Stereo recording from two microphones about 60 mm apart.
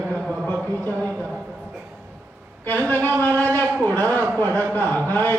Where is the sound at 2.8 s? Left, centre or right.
Left.